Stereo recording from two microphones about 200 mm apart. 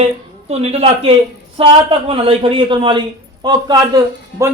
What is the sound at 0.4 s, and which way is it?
A man's voice, 30° right (ahead or behind).